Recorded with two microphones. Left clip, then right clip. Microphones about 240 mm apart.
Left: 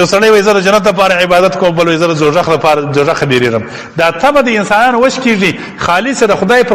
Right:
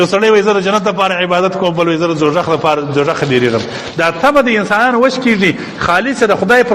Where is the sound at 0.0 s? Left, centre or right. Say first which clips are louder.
Left 3 dB; left.